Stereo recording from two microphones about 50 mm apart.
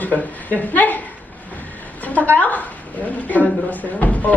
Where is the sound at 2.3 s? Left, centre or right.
Left.